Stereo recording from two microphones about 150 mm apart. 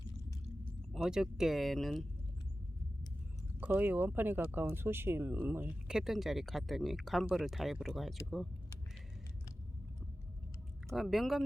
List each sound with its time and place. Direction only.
0.9 s speech: 5° right (ahead or behind)
3.6 s speech: 10° right (ahead or behind)
10.9 s speech: centre (ahead or behind)